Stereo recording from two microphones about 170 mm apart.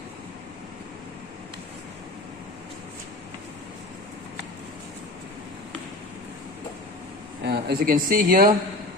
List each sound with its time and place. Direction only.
7.4 s speech: 70° right (ahead or behind); by 8.5 s 55° right (ahead or behind)